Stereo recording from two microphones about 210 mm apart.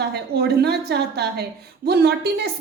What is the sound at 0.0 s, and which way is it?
A woman's voice, 50° right (ahead or behind).